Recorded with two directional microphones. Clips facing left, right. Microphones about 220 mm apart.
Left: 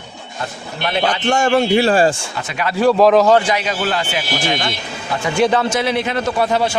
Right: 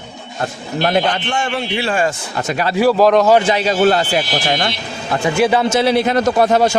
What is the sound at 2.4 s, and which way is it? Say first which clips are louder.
Speech: right 10 dB; 45° right (ahead or behind).